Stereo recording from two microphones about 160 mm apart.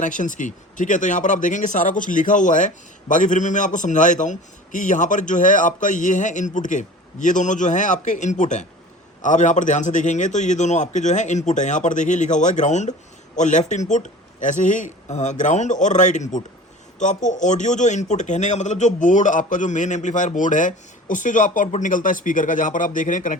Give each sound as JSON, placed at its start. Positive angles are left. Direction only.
{"t": 0.0, "sound": "speech", "side_deg": 55}